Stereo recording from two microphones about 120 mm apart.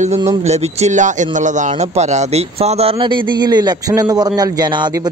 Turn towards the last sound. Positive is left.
turn(degrees=-35)  # may be behind; listen again after turning